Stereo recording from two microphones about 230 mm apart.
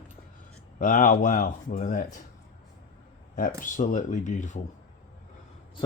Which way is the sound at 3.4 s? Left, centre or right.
Left.